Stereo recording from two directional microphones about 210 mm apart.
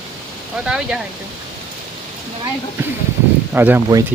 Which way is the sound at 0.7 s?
5° right (ahead or behind).